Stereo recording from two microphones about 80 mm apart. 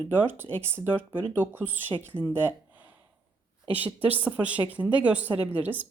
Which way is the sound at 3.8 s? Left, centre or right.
Right.